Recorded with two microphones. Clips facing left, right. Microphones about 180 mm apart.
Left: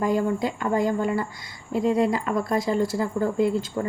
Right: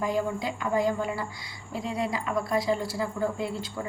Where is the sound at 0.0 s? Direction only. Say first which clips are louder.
Left 5 dB; 50° left (ahead or behind).